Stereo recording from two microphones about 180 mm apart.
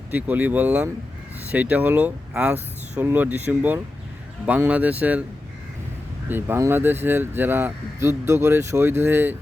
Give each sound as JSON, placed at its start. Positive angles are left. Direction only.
{"t": 0.1, "sound": "speech", "side_deg": -10}
{"t": 6.2, "sound": "speech", "side_deg": -10}